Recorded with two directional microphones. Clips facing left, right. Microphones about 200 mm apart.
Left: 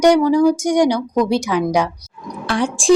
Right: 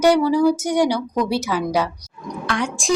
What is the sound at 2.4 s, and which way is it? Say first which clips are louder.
Speech: left 5 dB; 30° left (ahead or behind).